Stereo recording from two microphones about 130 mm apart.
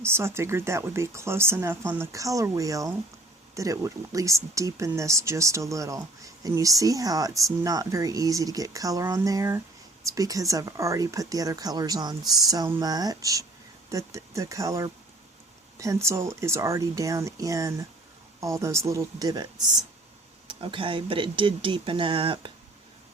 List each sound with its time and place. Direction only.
0.0 s speech: 20° right (ahead or behind)
20.5 s speech: 40° right (ahead or behind)